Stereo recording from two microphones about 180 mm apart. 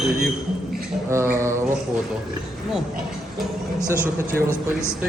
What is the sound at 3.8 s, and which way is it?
Speech, 10° right (ahead or behind).